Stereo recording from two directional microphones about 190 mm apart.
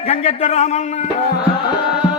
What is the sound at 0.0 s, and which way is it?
A man's voice, 30° left (ahead or behind).